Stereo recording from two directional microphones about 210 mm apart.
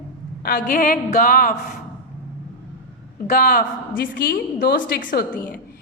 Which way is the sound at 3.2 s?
45° left (ahead or behind).